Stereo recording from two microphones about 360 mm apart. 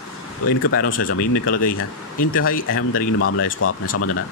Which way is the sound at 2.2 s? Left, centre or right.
Left.